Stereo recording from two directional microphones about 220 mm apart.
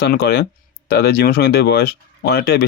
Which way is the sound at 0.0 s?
45° left (ahead or behind).